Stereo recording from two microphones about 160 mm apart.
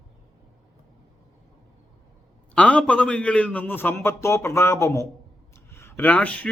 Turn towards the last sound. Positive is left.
turn(degrees=10)  # may be behind; listen again after turning